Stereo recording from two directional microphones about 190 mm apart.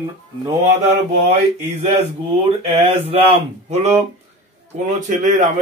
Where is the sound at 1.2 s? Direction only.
35° right (ahead or behind).